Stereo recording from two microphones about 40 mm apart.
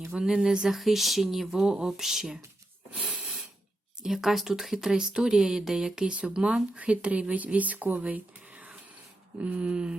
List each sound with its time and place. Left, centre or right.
0.2 s speech: centre
0.7 s speech: centre
3.0 s a sound: right
3.2 s a sound: centre
4.0 s speech: centre
6.7 s speech: right